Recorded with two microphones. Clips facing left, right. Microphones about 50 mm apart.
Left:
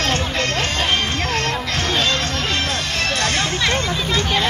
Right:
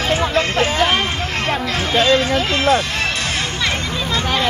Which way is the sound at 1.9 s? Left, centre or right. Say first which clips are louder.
Right 8 dB; centre.